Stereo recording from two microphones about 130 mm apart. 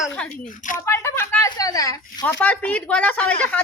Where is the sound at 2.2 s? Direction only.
15° left (ahead or behind).